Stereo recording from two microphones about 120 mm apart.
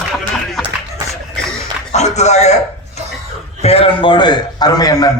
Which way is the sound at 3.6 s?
55° left (ahead or behind).